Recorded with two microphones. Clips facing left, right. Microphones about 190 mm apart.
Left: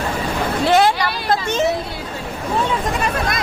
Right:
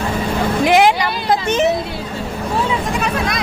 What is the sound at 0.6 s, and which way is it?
Vehicle, 15° right (ahead or behind).